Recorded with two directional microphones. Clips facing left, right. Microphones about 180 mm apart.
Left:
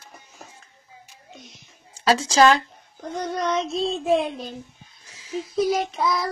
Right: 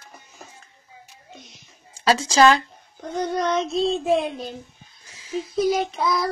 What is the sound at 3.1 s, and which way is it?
Child singing, centre (ahead or behind).